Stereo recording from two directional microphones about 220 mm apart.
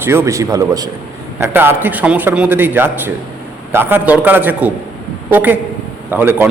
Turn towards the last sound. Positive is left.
turn(degrees=-10)  # may be behind; listen again after turning